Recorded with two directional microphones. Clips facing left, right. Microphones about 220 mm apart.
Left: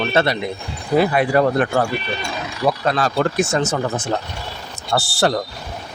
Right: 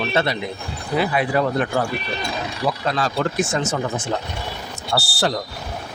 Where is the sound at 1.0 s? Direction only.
50° left (ahead or behind).